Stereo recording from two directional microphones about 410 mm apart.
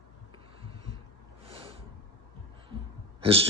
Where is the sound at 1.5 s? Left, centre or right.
Centre.